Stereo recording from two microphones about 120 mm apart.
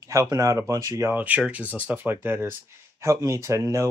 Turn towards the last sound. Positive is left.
turn(degrees=-25)  # may be behind; listen again after turning